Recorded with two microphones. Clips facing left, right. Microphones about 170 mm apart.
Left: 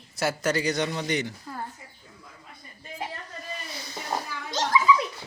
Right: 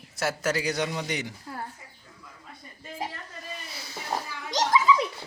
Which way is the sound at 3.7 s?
5° right (ahead or behind).